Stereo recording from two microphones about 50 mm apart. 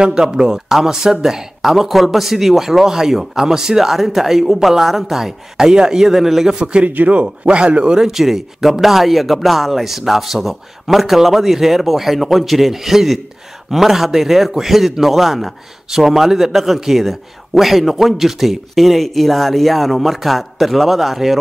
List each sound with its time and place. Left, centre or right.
0.0 s speech: centre
6.6 s a man's voice: right
8.0 s a man's voice: centre